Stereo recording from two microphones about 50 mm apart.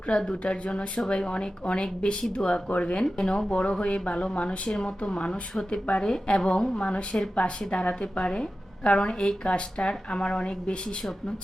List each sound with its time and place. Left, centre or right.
0.1 s a woman's voice: centre